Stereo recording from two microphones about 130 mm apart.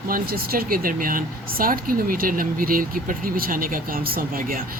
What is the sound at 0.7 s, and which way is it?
Speech, 90° right.